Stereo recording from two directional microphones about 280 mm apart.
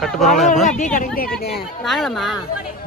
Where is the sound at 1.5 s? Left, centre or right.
Centre.